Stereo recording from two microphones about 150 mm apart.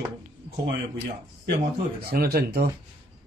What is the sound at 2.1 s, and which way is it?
Speech, 90° right.